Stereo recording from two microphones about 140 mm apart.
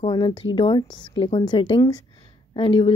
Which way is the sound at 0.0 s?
35° left (ahead or behind).